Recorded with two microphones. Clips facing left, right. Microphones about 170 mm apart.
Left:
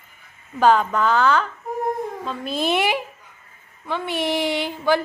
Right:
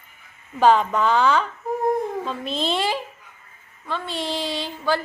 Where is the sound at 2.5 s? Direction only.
15° left (ahead or behind).